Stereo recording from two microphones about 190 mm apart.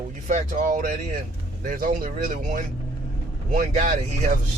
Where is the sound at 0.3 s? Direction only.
40° right (ahead or behind).